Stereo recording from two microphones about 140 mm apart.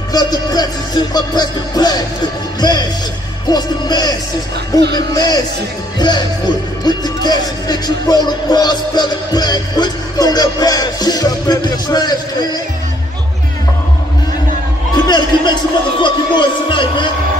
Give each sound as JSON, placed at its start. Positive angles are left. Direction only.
{"t": 0.1, "sound": "speech", "side_deg": 25}
{"t": 15.0, "sound": "speech", "side_deg": 30}